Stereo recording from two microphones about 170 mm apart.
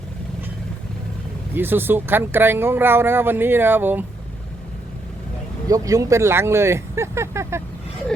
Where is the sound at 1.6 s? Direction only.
10° right (ahead or behind).